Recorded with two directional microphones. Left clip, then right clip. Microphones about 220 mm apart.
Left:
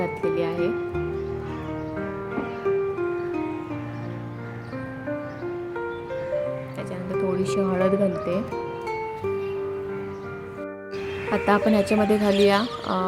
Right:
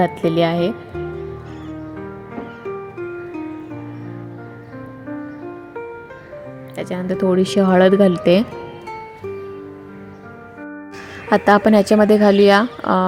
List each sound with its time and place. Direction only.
0.0 s speech: 30° right (ahead or behind)
6.7 s speech: 30° right (ahead or behind)
11.3 s speech: 35° right (ahead or behind)